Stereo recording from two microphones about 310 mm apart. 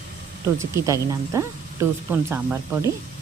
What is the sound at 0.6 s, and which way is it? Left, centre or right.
Speech, centre.